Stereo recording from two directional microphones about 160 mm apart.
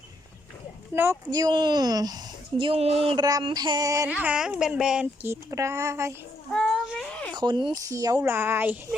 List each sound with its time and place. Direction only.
0.9 s speech: 15° right (ahead or behind)
1.3 s speech: 25° right (ahead or behind)
2.6 s speech: 35° right (ahead or behind)
3.2 s speech: 25° right (ahead or behind)
4.1 s speech: 5° right (ahead or behind)
6.5 s a sound: 5° left (ahead or behind)
7.3 s speech: 30° right (ahead or behind); by 9.0 s 10° right (ahead or behind)